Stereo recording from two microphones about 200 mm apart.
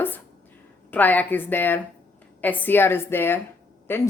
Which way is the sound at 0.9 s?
10° left (ahead or behind).